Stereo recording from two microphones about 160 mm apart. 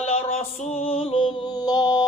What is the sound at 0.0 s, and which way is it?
Music, 40° left (ahead or behind).